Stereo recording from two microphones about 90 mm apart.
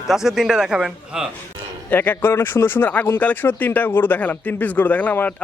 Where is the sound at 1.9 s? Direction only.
20° left (ahead or behind).